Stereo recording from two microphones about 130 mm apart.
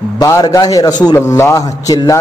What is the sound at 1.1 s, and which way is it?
A man's voice, 20° left (ahead or behind).